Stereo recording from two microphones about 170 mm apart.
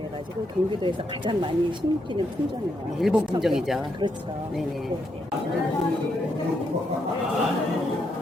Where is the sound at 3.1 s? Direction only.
Centre (ahead or behind).